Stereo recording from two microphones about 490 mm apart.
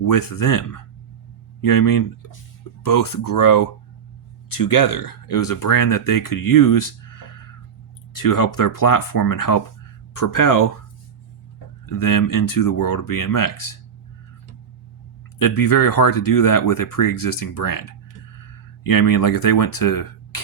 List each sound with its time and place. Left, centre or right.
0.0 s speech: left
11.9 s speech: left
15.4 s speech: left